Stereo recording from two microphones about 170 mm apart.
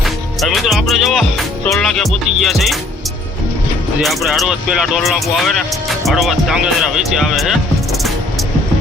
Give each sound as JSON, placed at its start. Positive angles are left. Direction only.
{"t": 0.0, "sound": "speech", "side_deg": 0}
{"t": 4.0, "sound": "speech", "side_deg": 0}